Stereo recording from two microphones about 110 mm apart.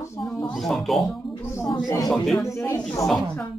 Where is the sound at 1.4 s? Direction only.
25° left (ahead or behind).